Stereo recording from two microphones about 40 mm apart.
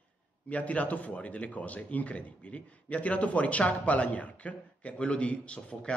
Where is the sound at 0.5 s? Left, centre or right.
Left.